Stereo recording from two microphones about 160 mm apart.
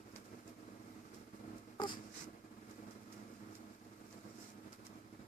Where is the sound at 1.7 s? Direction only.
30° left (ahead or behind).